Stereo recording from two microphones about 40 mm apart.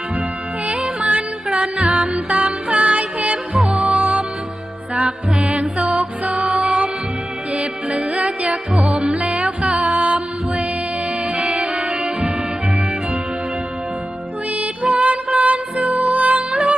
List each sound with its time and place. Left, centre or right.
0.7 s music: right
3.6 s music: centre
3.8 s music: right
6.4 s music: right
8.9 s music: right
14.8 s music: right
16.5 s music: centre